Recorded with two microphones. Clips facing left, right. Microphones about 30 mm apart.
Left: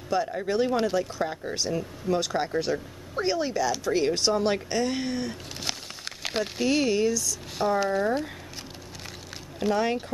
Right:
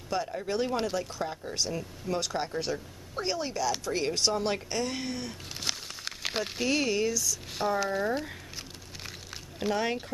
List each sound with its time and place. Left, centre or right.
0.1 s speech: centre
1.6 s speech: centre
9.6 s speech: centre